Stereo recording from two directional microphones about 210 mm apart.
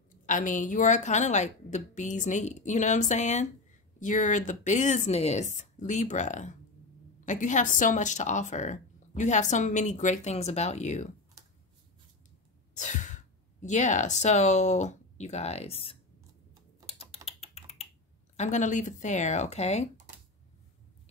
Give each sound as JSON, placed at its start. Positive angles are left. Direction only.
{"t": 0.3, "sound": "a woman's voice", "side_deg": 35}
{"t": 12.7, "sound": "speech", "side_deg": 35}
{"t": 16.8, "sound": "typing", "side_deg": 30}
{"t": 18.3, "sound": "a woman's voice", "side_deg": 35}